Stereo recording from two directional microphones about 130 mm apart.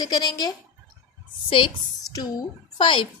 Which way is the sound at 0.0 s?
30° left (ahead or behind).